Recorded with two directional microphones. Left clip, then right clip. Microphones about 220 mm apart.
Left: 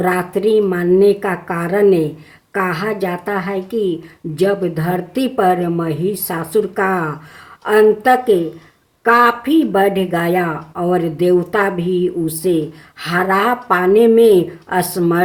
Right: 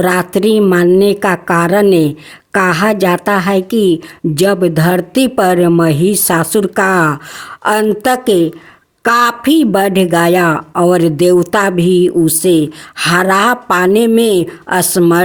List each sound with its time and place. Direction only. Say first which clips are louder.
0.0 s speech: right 4 dB; 50° right (ahead or behind)